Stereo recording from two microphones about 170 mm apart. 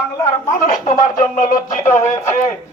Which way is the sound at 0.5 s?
50° left (ahead or behind).